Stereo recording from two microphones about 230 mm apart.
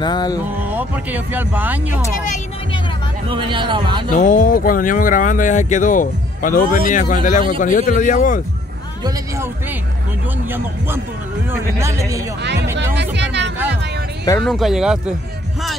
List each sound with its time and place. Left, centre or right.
0.0 s music: centre
0.7 s speech: centre
3.3 s speech: right
4.2 s speech: left
9.0 s speech: centre
11.8 s speech: centre
12.4 s speech: right
14.4 s speech: centre